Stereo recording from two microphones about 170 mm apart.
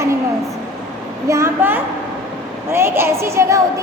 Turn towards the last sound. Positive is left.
turn(degrees=-15)  # may be behind; listen again after turning